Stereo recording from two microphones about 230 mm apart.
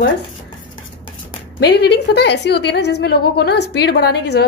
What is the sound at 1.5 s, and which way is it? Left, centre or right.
A woman's voice, left.